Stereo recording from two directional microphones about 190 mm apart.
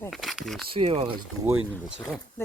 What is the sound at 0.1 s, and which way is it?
Speech, centre (ahead or behind).